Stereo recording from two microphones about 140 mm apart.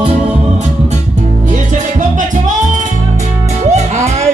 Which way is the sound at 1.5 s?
60° right (ahead or behind).